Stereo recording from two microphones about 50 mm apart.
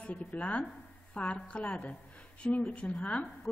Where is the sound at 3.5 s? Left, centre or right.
Left.